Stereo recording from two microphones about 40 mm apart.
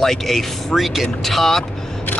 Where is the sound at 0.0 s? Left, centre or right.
Centre.